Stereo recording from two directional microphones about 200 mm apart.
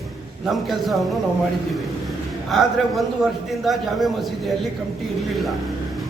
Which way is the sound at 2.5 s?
Centre (ahead or behind).